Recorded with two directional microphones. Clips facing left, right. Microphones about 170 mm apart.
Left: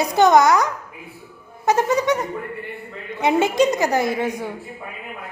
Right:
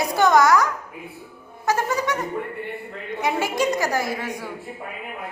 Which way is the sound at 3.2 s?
20° left (ahead or behind).